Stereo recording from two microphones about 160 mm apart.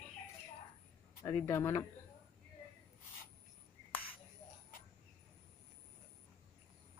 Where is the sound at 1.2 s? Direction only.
20° left (ahead or behind).